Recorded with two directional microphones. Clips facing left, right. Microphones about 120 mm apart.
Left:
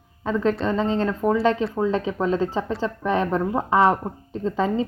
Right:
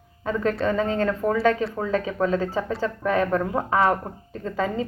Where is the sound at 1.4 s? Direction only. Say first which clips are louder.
Left 1 dB; 25° left (ahead or behind).